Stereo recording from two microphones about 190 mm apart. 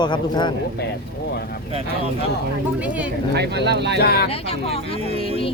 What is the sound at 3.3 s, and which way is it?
Speech, 60° right (ahead or behind).